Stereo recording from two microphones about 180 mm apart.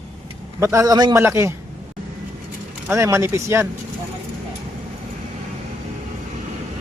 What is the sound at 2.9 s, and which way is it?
Speech, 15° right (ahead or behind).